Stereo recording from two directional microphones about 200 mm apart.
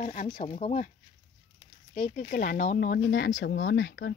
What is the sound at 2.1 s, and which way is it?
Speech, 50° left (ahead or behind).